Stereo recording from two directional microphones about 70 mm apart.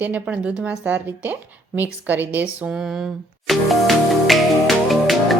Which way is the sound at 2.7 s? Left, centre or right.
Centre.